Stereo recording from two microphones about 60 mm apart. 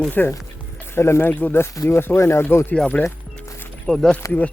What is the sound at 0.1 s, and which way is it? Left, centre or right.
Speech, left.